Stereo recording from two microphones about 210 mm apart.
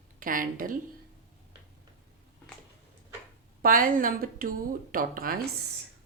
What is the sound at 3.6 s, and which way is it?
A woman's voice, 40° right (ahead or behind).